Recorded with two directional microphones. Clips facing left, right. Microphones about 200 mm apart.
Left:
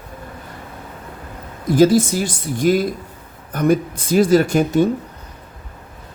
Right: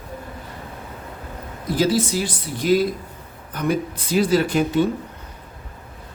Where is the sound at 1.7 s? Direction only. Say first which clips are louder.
Left 7 dB; 45° left (ahead or behind).